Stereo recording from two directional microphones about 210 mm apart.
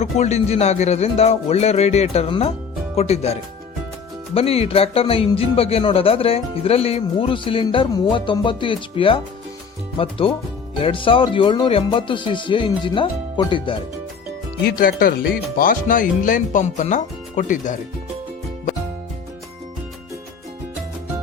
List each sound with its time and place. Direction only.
0.0 s speech: 30° left (ahead or behind)
4.4 s speech: 30° left (ahead or behind)
14.8 s speech: 40° left (ahead or behind)